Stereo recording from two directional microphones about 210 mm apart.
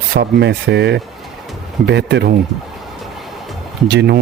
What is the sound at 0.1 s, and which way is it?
Speech, 55° right (ahead or behind).